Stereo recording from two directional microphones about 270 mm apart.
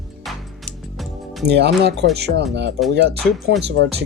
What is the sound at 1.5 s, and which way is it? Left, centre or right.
Speech, right.